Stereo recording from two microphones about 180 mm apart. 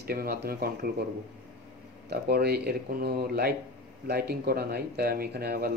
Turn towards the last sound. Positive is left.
turn(degrees=-60)  # may be behind; listen again after turning